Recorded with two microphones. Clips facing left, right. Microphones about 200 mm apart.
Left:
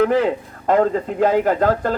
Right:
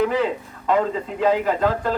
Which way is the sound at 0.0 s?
50° left (ahead or behind).